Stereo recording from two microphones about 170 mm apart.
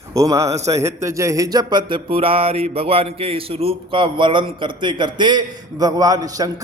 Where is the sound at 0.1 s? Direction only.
20° right (ahead or behind).